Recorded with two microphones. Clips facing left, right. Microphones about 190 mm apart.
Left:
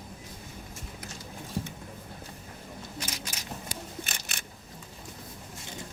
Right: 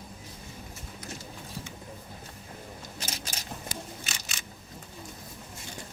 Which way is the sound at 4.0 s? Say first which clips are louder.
Left 2 dB; 55° left (ahead or behind).